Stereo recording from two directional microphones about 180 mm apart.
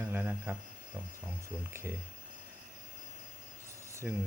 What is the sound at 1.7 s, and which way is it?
Speech, 15° right (ahead or behind).